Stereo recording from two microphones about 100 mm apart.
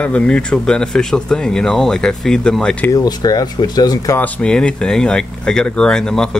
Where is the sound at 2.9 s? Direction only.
40° left (ahead or behind).